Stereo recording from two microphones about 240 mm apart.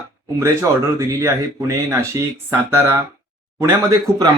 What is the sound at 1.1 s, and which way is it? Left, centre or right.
Speech, centre.